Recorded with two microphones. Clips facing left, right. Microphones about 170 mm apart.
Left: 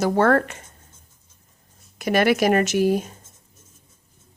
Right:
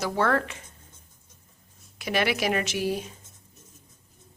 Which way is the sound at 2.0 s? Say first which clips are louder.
Left 7 dB; 45° left (ahead or behind).